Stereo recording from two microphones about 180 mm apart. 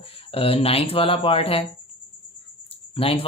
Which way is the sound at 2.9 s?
30° left (ahead or behind).